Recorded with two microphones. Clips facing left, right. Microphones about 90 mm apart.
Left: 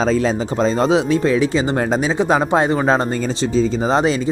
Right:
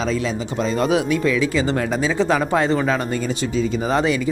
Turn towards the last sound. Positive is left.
turn(degrees=25)  # may be behind; listen again after turning